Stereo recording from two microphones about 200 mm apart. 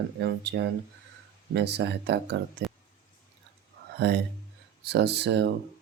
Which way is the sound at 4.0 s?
55° right (ahead or behind).